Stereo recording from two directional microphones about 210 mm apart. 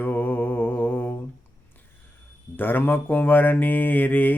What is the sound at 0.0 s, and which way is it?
Mantra, 10° left (ahead or behind).